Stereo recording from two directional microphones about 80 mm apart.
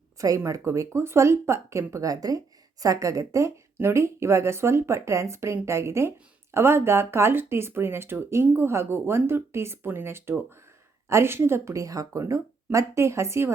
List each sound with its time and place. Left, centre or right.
0.2 s a woman's voice: right